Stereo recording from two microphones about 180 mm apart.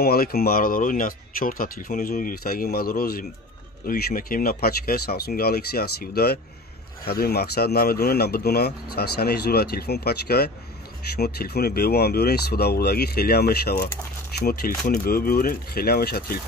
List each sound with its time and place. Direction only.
0.0 s speech: 55° left (ahead or behind)